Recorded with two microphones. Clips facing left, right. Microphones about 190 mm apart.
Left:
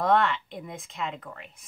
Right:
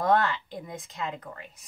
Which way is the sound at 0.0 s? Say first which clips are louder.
Left 1 dB; centre (ahead or behind).